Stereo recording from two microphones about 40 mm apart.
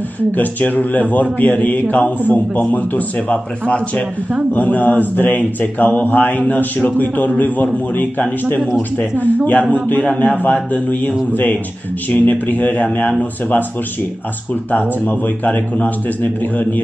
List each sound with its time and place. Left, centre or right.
0.3 s speech: left
3.2 s speech: left
4.6 s speech: left
14.7 s speech: left